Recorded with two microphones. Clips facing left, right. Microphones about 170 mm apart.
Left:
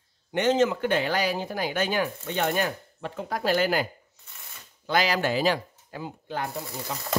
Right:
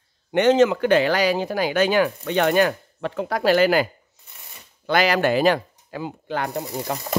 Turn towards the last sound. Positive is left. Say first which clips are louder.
# right 7 dB
turn(degrees=-50)  # may be behind; listen again after turning